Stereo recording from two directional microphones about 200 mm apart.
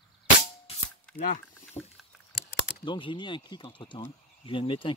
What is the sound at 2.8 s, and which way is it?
Speech, 25° left (ahead or behind).